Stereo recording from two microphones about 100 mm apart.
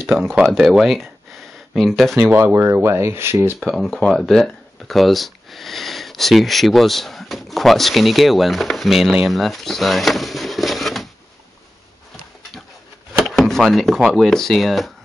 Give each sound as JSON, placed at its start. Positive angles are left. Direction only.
{"t": 0.1, "sound": "speech", "side_deg": 0}
{"t": 2.2, "sound": "speech", "side_deg": -25}
{"t": 3.5, "sound": "speech", "side_deg": 0}
{"t": 13.2, "sound": "speech", "side_deg": 5}